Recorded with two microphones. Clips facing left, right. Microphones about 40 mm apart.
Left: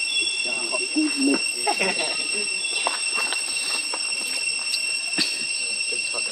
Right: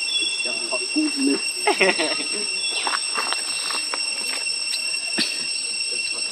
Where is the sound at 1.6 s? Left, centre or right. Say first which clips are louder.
Right 5 dB; right.